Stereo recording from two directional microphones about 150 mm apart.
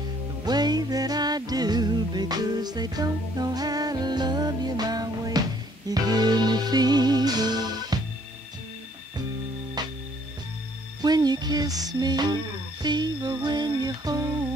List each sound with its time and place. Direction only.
0.5 s music: 25° right (ahead or behind)
9.8 s music: 25° right (ahead or behind)
11.0 s music: 25° right (ahead or behind)